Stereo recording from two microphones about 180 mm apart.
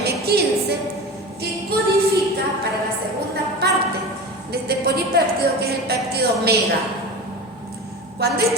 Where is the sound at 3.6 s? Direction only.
60° right (ahead or behind).